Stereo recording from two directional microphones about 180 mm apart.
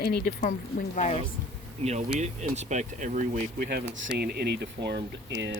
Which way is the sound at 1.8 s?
35° right (ahead or behind).